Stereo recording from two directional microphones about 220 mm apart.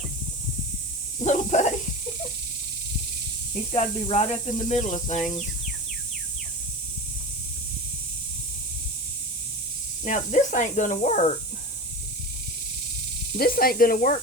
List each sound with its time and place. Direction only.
1.2 s speech: 35° left (ahead or behind)
3.7 s speech: 30° left (ahead or behind)
10.0 s speech: 35° left (ahead or behind)
13.3 s speech: 45° left (ahead or behind)